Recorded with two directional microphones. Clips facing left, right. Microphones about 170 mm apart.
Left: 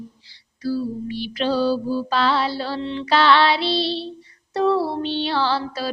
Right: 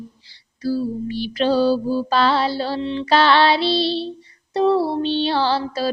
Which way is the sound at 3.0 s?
35° right (ahead or behind).